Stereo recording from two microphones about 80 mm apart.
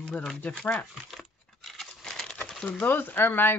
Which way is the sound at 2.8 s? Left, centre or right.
Left.